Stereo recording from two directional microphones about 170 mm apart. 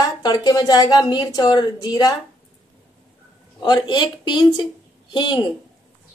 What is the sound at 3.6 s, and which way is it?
A woman's voice, 25° left (ahead or behind).